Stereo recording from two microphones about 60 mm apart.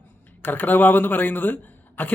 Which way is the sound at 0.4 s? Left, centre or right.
Left.